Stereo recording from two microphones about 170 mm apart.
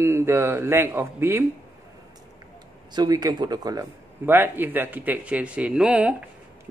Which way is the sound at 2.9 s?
25° right (ahead or behind).